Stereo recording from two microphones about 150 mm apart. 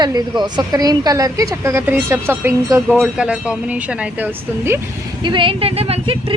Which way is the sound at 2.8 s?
Centre (ahead or behind).